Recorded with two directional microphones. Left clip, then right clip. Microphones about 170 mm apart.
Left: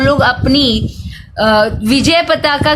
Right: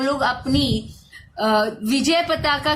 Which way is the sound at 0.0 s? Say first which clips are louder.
Left 10 dB; 55° left (ahead or behind).